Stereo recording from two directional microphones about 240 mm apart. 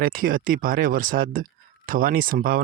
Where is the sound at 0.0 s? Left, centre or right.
Right.